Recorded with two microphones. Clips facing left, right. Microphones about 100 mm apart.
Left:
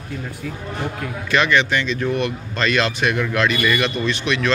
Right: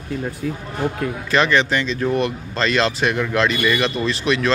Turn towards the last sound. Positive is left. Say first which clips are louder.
# right 1 dB
turn(degrees=-35)  # may be behind; listen again after turning